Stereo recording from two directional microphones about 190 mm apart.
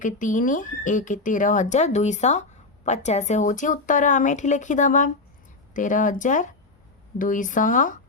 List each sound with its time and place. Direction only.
0.0 s speech: 45° left (ahead or behind)